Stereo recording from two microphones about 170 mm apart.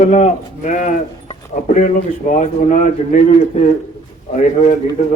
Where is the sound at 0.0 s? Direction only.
45° left (ahead or behind).